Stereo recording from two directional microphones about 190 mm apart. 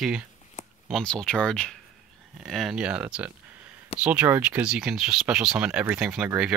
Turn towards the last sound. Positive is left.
turn(degrees=-5)  # may be behind; listen again after turning